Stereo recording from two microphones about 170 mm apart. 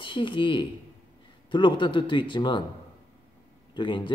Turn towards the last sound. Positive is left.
turn(degrees=30)  # may be behind; listen again after turning